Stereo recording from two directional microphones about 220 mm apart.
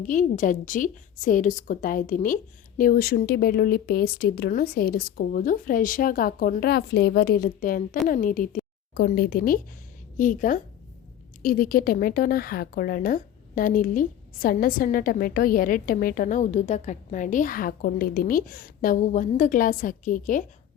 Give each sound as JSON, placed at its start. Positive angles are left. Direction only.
{"t": 0.0, "sound": "a woman's voice", "side_deg": 35}